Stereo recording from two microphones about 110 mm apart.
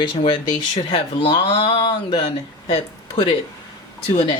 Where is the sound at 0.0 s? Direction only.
45° left (ahead or behind).